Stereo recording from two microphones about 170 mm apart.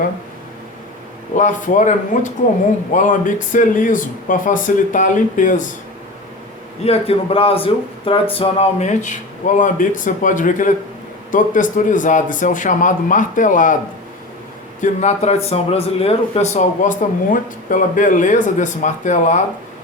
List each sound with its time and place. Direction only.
1.4 s speech: 50° left (ahead or behind)
6.8 s speech: 35° left (ahead or behind)
14.8 s speech: 40° left (ahead or behind)